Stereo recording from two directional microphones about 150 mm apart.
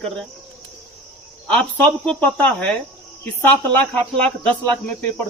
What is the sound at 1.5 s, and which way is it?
Speech, 10° left (ahead or behind).